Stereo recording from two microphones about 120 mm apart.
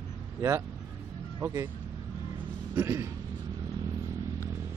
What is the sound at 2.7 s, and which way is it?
Speech, 25° right (ahead or behind).